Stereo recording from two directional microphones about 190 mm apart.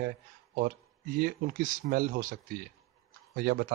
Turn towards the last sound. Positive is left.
turn(degrees=-55)  # may be behind; listen again after turning